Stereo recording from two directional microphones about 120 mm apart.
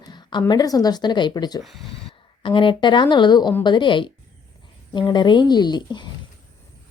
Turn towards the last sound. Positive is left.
turn(degrees=35)  # may be behind; listen again after turning